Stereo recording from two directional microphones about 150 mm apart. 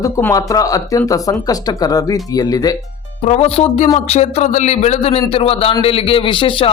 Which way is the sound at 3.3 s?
45° left (ahead or behind).